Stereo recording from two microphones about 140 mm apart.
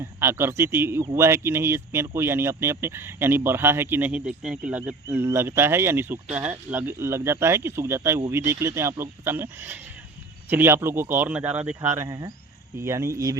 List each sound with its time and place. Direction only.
0.0 s speech: 20° right (ahead or behind)
5.0 s speech: 20° right (ahead or behind)
12.0 s speech: 25° right (ahead or behind)